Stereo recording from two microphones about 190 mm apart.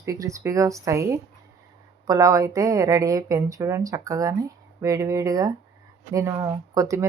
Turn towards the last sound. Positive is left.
turn(degrees=-15)  # may be behind; listen again after turning